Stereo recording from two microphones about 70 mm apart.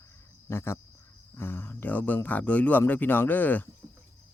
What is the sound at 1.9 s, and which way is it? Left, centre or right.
Speech, left.